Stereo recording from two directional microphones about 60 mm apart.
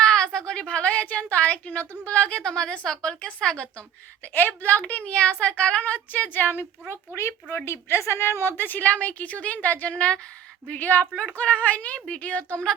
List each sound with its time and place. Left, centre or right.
0.0 s a woman's voice: centre
4.2 s a woman's voice: left
7.5 s a woman's voice: left